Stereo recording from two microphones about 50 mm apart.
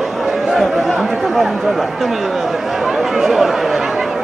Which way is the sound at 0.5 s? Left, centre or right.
Centre.